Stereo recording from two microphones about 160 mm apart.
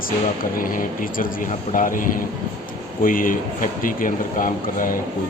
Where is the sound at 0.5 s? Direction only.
60° left (ahead or behind).